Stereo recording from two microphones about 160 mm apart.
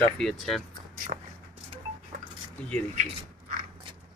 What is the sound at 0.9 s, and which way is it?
Walk, 60° right (ahead or behind).